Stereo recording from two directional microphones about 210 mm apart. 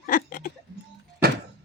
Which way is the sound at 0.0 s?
45° left (ahead or behind).